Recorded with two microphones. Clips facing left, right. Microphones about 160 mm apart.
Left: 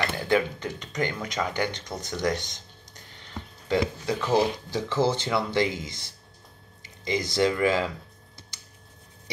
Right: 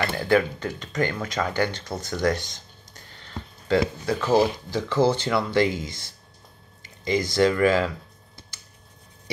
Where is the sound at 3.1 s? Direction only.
20° left (ahead or behind).